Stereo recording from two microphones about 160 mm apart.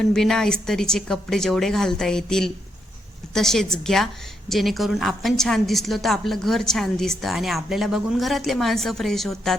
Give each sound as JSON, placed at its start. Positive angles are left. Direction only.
{"t": 0.0, "sound": "a woman's voice", "side_deg": 5}